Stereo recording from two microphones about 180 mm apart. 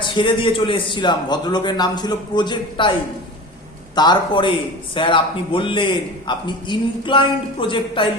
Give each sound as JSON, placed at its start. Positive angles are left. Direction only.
{"t": 0.0, "sound": "a man's voice", "side_deg": 25}
{"t": 3.9, "sound": "a man's voice", "side_deg": 25}